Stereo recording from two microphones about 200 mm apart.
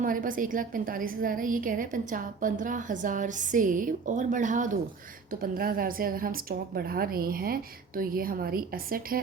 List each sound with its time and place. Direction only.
0.0 s a woman's voice: 45° right (ahead or behind)